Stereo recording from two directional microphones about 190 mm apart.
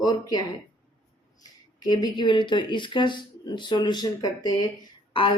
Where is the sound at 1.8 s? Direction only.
20° left (ahead or behind).